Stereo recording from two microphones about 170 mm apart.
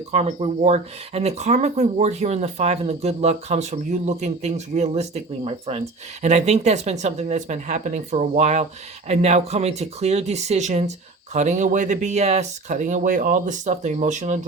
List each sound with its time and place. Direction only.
0.1 s speech: 40° right (ahead or behind)